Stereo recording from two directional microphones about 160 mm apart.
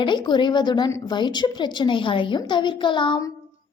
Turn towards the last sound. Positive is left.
turn(degrees=30)  # may be behind; listen again after turning